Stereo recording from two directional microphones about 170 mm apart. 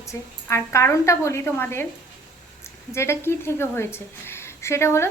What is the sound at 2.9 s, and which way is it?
A woman's voice, 15° left (ahead or behind).